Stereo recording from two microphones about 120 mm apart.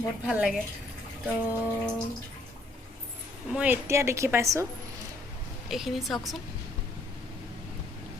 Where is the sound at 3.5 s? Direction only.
10° right (ahead or behind).